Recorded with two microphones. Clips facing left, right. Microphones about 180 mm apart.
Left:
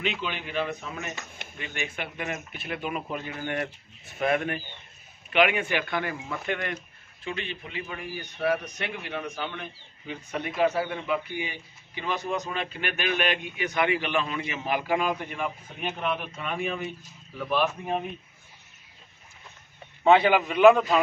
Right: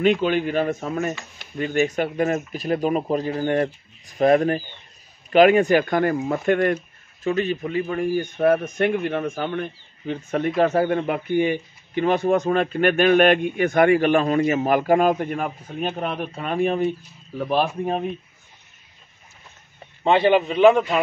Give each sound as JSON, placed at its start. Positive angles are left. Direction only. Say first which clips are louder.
{"t": 0.0, "sound": "a man's voice", "louder": "right 13 dB", "side_deg": -50}
{"t": 20.0, "sound": "a man's voice", "louder": "right 2 dB", "side_deg": -30}